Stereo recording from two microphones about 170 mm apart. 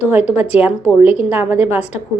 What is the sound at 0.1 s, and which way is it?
A woman's voice, 10° right (ahead or behind).